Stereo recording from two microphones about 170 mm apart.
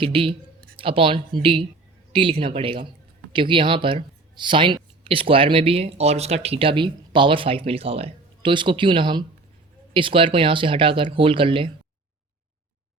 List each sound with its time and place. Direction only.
0.0 s speech: 30° right (ahead or behind)